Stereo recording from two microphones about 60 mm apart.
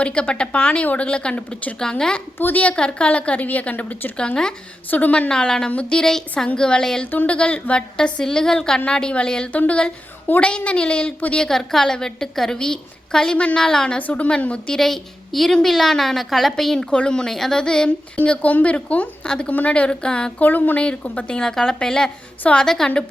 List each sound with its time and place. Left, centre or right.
0.0 s a woman's voice: centre
2.4 s a woman's voice: left
2.7 s a woman's voice: centre
5.3 s a woman's voice: centre
7.1 s a woman's voice: left
7.3 s a woman's voice: centre
11.4 s a woman's voice: centre
14.8 s a woman's voice: centre
16.9 s a woman's voice: centre
20.4 s a woman's voice: left; by 22.9 s centre